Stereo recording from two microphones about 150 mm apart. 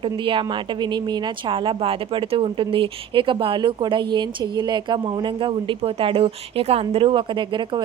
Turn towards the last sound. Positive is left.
turn(degrees=-30)  # may be behind; listen again after turning